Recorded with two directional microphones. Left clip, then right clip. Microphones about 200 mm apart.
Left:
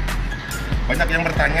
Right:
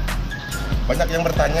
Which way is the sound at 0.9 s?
5° right (ahead or behind).